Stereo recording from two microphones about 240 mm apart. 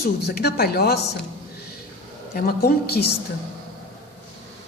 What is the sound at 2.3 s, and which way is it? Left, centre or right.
Speech, left.